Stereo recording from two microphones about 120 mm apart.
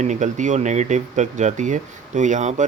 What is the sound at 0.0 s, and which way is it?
Speech, 85° right.